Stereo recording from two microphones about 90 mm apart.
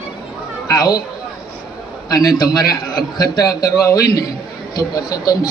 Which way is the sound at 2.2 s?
45° left (ahead or behind).